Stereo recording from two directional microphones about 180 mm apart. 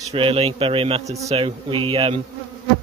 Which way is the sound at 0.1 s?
30° right (ahead or behind).